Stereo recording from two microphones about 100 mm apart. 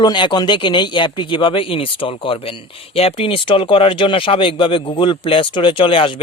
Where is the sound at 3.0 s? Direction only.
75° left (ahead or behind).